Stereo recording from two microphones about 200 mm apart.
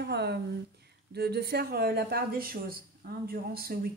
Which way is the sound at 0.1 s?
55° right (ahead or behind).